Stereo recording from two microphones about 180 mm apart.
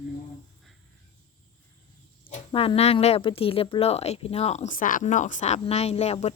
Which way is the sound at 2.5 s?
30° left (ahead or behind).